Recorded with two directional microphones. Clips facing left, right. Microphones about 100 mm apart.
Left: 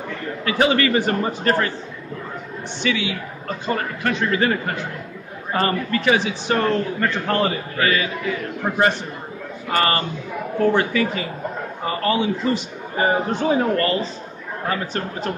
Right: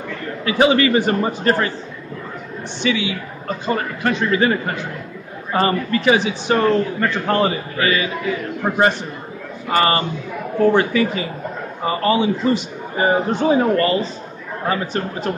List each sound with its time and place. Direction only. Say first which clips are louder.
0.5 s a man's voice: right 3 dB; 15° right (ahead or behind)
2.8 s a man's voice: right 3 dB; 20° right (ahead or behind)